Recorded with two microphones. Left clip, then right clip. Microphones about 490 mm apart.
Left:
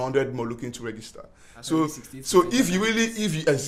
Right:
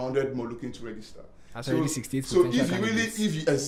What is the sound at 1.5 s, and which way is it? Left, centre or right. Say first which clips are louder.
Speech: left 3 dB; right.